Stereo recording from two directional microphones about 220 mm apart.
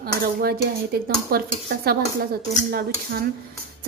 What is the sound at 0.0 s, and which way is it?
Speech, 45° right (ahead or behind).